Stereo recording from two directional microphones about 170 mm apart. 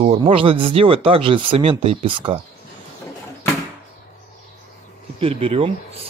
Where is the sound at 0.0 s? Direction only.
35° right (ahead or behind).